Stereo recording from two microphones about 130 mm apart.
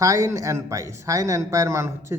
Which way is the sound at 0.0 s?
25° right (ahead or behind).